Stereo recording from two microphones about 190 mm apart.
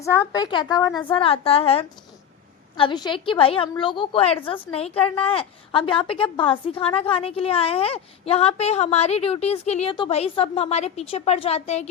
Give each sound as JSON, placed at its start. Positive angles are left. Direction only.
{"t": 0.0, "sound": "a woman's voice", "side_deg": 15}